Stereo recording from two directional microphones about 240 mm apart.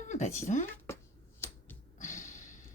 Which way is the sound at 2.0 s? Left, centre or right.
Left.